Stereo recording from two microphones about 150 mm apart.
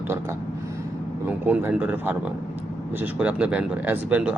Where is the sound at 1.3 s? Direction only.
10° right (ahead or behind).